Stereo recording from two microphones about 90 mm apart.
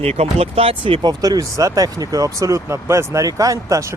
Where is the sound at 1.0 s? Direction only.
45° right (ahead or behind).